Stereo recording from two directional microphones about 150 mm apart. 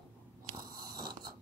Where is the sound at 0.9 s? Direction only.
25° right (ahead or behind).